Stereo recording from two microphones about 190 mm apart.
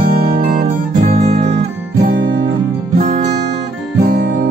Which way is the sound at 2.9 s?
45° right (ahead or behind).